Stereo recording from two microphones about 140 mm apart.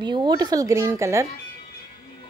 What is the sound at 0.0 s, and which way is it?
Speech, 30° right (ahead or behind).